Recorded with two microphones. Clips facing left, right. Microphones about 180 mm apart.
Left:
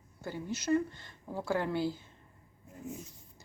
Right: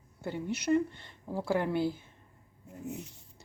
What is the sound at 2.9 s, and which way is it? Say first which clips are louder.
Speech: right 3 dB; 70° right (ahead or behind).